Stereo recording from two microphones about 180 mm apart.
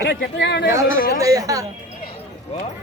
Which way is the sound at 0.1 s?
70° left (ahead or behind).